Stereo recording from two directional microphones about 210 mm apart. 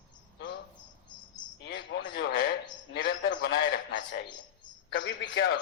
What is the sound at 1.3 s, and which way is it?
A man's voice, 55° left (ahead or behind).